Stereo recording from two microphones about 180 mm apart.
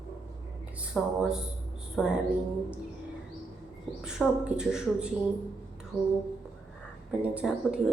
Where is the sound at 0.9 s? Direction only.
5° left (ahead or behind).